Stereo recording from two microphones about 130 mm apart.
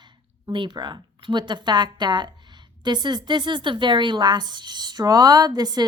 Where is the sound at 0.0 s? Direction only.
35° right (ahead or behind).